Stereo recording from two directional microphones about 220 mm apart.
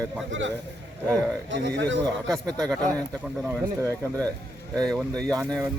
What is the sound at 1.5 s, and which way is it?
Speech, 55° right (ahead or behind).